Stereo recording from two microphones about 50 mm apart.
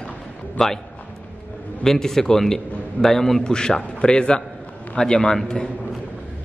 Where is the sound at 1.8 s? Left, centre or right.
Centre.